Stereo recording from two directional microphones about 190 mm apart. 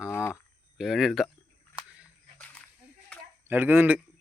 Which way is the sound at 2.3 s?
5° left (ahead or behind).